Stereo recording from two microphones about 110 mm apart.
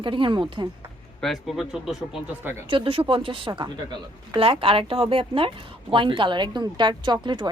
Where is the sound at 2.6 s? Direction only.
55° right (ahead or behind).